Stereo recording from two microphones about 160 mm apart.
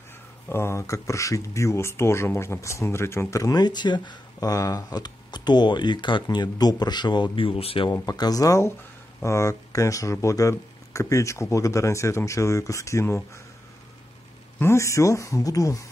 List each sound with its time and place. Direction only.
0.5 s speech: 15° left (ahead or behind); by 7.9 s 35° left (ahead or behind)
7.9 s speech: 20° left (ahead or behind)
14.6 s speech: 15° left (ahead or behind)